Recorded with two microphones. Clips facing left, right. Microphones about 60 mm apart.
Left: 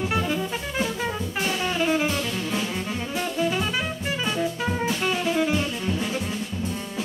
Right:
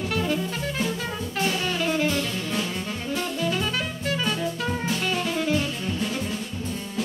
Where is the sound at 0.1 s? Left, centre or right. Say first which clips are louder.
Left 1 dB; centre.